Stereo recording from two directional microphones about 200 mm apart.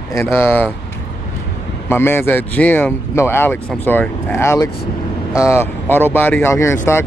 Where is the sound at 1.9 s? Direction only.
10° left (ahead or behind).